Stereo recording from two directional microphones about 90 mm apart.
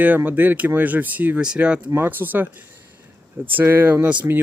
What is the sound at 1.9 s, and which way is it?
Speech, 25° right (ahead or behind).